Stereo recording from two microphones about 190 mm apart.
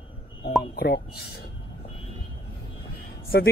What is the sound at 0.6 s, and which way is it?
Speech, 60° left (ahead or behind).